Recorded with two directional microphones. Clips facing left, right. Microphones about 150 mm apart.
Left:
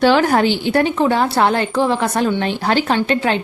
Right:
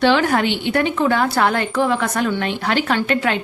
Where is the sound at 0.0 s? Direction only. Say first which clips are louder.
Left 3 dB; 40° left (ahead or behind).